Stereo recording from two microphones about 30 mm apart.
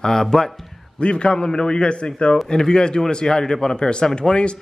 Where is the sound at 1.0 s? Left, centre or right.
Left; by 3.8 s centre.